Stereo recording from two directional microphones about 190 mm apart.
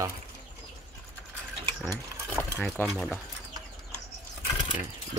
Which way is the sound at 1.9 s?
10° left (ahead or behind).